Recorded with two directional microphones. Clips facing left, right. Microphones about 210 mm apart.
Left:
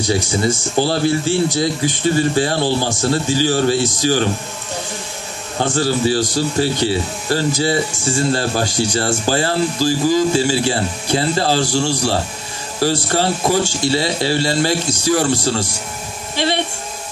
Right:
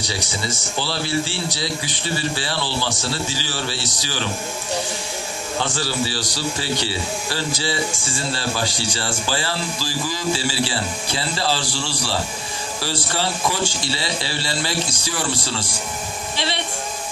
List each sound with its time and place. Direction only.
0.1 s speech: 45° left (ahead or behind)
5.6 s speech: 45° left (ahead or behind)